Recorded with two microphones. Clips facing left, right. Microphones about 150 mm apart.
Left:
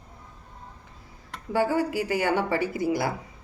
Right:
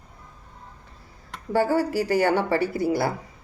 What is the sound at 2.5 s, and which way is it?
Speech, 15° left (ahead or behind).